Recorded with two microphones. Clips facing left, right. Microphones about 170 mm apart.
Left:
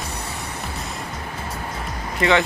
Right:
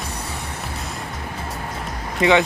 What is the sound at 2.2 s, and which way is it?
Speech, 20° right (ahead or behind).